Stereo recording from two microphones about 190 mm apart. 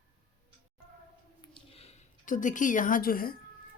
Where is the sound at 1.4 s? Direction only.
30° left (ahead or behind); by 3.3 s 50° left (ahead or behind).